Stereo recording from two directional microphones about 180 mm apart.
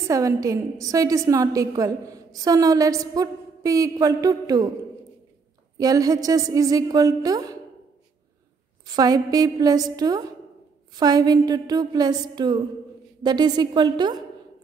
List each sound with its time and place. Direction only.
0.0 s a woman's voice: 15° right (ahead or behind)
5.8 s a woman's voice: 20° right (ahead or behind)
8.8 s a woman's voice: 20° right (ahead or behind)